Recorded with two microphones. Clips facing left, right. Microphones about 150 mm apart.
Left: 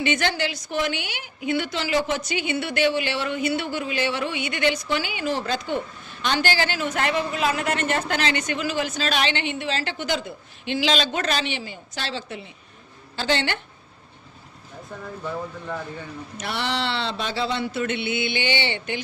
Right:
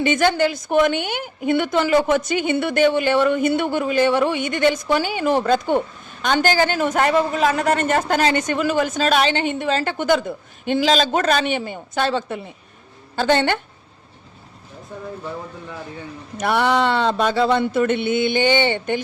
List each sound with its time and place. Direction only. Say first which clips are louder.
0.0 s speech: right 7 dB; 45° right (ahead or behind)
16.4 s speech: right 9 dB; 55° right (ahead or behind)